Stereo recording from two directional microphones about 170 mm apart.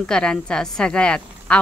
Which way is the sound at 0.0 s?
5° left (ahead or behind).